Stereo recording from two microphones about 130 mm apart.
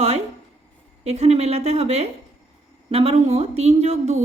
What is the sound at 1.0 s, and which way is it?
A woman's voice, 55° right (ahead or behind).